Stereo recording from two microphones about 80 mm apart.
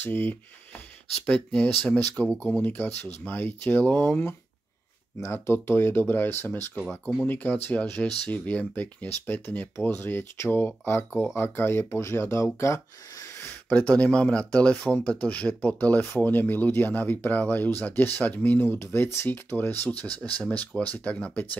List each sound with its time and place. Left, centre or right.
0.0 s speech: left
1.2 s speech: centre
5.3 s speech: left
13.4 s speech: left